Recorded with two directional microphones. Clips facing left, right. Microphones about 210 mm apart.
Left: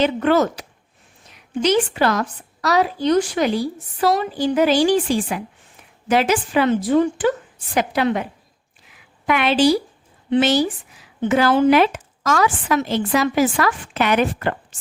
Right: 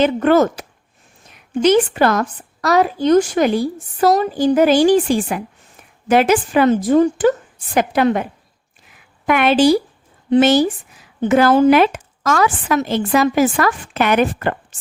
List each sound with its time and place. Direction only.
0.0 s a woman's voice: 50° right (ahead or behind)